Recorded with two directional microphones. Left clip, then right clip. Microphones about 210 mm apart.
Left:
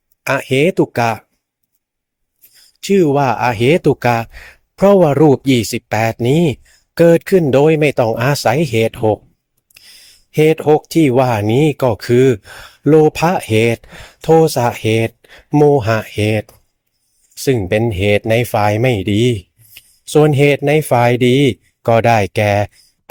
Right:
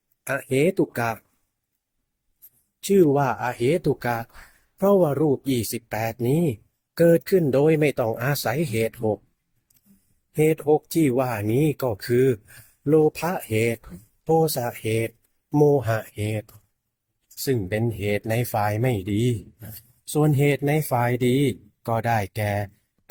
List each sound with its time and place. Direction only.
0.3 s speech: 40° left (ahead or behind)
2.8 s speech: 35° left (ahead or behind)
10.3 s speech: 40° left (ahead or behind)
15.5 s speech: 25° left (ahead or behind)
15.8 s speech: 40° left (ahead or behind)